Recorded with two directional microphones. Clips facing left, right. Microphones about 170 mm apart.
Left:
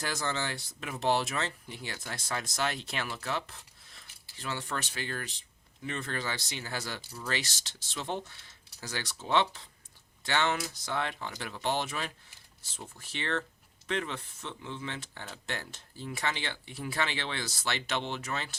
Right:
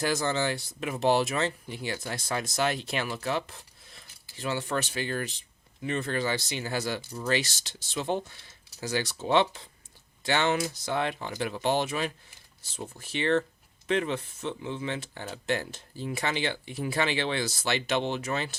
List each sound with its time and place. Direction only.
0.0 s speech: 10° right (ahead or behind)
2.0 s speech: 20° right (ahead or behind)